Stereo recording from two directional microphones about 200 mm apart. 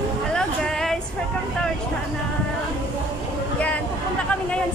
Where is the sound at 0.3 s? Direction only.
5° left (ahead or behind).